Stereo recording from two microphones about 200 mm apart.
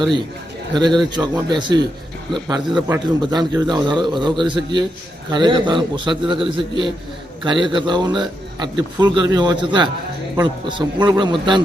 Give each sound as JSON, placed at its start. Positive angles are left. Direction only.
{"t": 0.7, "sound": "speech", "side_deg": -20}
{"t": 2.6, "sound": "a man's voice", "side_deg": -5}
{"t": 3.2, "sound": "speech", "side_deg": -20}